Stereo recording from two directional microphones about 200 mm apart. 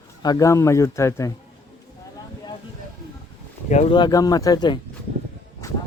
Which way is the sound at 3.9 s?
20° left (ahead or behind).